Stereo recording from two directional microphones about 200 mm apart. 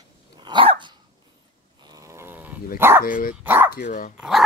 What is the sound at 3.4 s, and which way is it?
Speech, 10° right (ahead or behind).